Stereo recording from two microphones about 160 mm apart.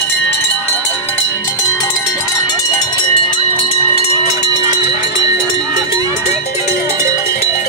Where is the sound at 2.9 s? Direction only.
35° left (ahead or behind).